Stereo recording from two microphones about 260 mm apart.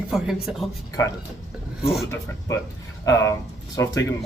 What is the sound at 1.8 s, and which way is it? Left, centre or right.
Speech, centre.